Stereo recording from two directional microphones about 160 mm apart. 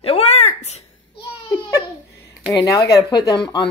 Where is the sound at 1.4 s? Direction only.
25° left (ahead or behind).